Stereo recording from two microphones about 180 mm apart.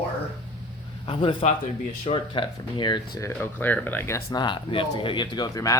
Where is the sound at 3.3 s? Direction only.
10° left (ahead or behind).